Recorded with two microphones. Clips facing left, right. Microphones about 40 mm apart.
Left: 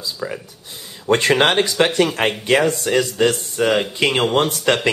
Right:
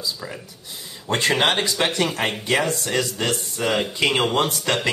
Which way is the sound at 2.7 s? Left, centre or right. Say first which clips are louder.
Left 5 dB; left.